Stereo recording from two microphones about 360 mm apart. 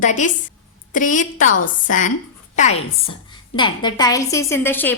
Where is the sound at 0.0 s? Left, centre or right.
Left.